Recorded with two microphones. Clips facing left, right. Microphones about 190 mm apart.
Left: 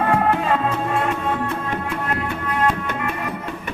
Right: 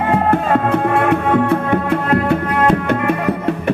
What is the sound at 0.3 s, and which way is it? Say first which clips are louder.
Music: right 5 dB; 55° right (ahead or behind).